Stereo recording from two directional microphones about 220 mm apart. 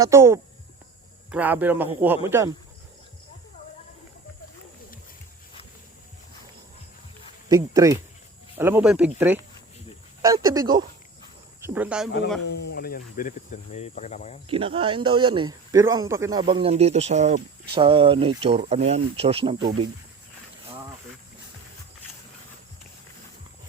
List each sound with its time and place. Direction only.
0.0 s a man's voice: 10° right (ahead or behind)
7.4 s a man's voice: 15° right (ahead or behind)
12.4 s speech: 50° left (ahead or behind); by 14.3 s 30° left (ahead or behind)
14.4 s speech: 25° right (ahead or behind)